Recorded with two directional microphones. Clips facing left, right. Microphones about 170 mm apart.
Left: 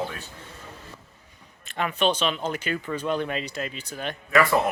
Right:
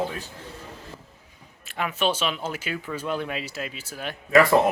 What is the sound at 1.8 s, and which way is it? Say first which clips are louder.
Speech: left 1 dB; 5° right (ahead or behind).